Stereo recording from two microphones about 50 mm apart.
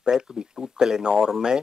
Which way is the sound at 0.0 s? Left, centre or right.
Centre.